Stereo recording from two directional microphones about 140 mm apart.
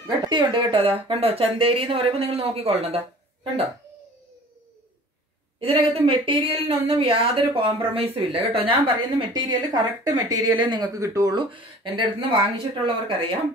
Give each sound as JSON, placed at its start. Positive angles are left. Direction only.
{"t": 0.0, "sound": "speech", "side_deg": -35}
{"t": 5.6, "sound": "speech", "side_deg": -40}
{"t": 11.5, "sound": "speech", "side_deg": -35}